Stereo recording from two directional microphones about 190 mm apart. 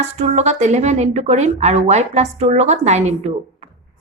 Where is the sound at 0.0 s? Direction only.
35° right (ahead or behind).